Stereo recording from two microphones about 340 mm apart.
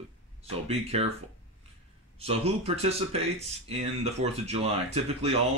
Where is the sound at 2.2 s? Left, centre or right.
Centre.